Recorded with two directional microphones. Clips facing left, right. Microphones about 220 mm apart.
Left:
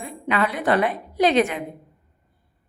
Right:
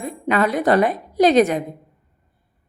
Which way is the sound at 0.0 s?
45° right (ahead or behind).